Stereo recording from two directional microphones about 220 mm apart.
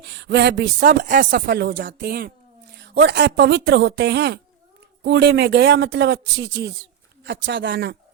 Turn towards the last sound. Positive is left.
turn(degrees=-50)  # may be behind; listen again after turning